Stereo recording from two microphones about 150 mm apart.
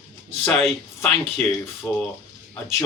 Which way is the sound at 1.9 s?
15° left (ahead or behind).